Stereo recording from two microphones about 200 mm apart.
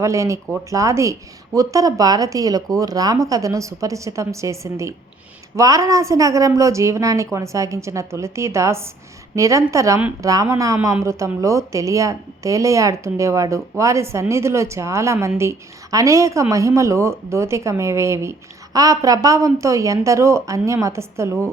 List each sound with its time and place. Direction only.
0.0 s a woman's voice: 15° right (ahead or behind)